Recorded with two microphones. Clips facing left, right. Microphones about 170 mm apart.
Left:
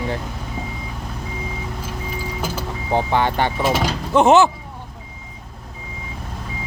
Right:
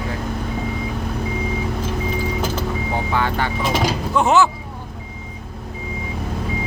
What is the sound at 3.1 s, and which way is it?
Speech, 25° left (ahead or behind).